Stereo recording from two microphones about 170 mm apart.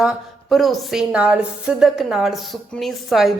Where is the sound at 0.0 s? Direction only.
Centre (ahead or behind).